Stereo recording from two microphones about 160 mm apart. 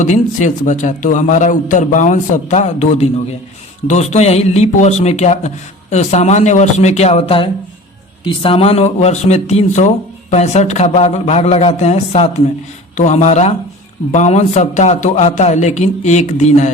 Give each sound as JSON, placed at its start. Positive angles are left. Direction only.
{"t": 0.0, "sound": "speech", "side_deg": 50}